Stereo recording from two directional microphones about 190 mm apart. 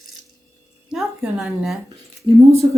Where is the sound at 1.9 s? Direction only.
30° right (ahead or behind).